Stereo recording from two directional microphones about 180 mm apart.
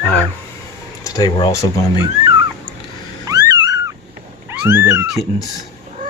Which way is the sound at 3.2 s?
20° right (ahead or behind).